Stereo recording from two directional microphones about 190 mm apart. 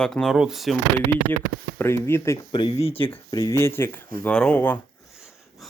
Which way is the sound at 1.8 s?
15° left (ahead or behind).